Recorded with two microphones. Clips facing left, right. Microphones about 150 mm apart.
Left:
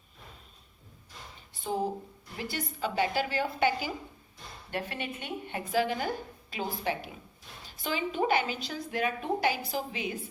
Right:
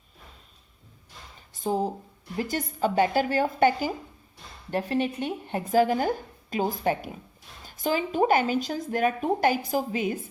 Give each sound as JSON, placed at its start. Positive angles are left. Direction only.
{"t": 1.5, "sound": "a woman's voice", "side_deg": -40}